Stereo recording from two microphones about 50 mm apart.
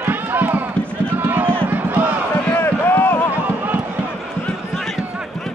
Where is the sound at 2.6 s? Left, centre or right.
Left.